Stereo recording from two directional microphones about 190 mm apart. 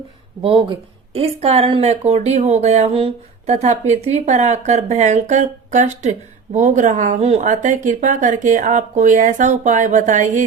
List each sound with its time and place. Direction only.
0.4 s speech: 30° right (ahead or behind)